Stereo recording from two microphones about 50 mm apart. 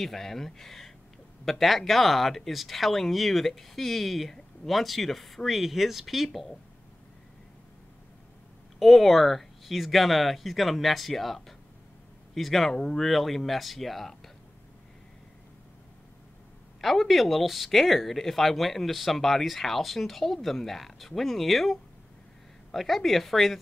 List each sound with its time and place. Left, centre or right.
0.0 s speech: centre
8.7 s speech: centre
16.8 s speech: centre